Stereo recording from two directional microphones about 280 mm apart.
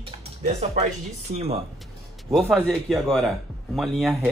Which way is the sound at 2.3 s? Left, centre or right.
Centre.